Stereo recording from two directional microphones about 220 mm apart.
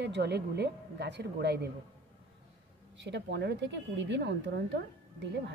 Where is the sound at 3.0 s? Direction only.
50° right (ahead or behind).